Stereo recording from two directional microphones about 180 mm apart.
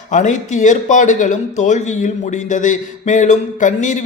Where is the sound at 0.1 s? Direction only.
45° left (ahead or behind).